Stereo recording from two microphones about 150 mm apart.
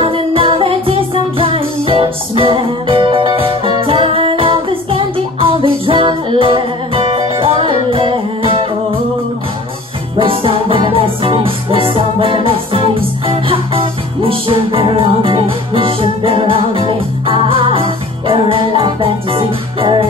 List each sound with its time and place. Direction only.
0.0 s music: 35° right (ahead or behind)
10.1 s music: 35° right (ahead or behind)